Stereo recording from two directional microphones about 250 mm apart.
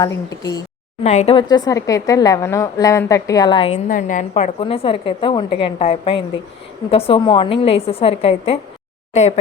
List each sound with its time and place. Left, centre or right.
0.0 s a woman's voice: centre
1.0 s a woman's voice: left
3.8 s a woman's voice: left